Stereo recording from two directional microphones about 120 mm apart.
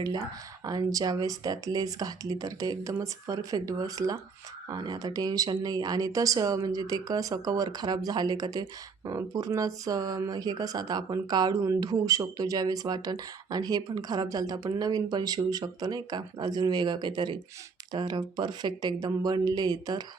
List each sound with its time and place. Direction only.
0.6 s speech: 30° right (ahead or behind)